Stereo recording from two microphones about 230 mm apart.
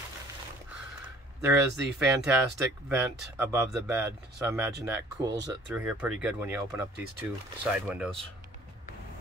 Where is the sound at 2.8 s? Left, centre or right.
Centre.